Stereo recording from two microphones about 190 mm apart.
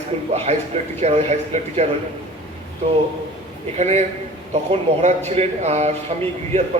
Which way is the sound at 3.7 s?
35° right (ahead or behind).